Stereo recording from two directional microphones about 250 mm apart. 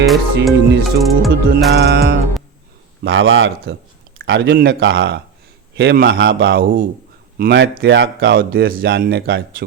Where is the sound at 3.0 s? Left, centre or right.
Right.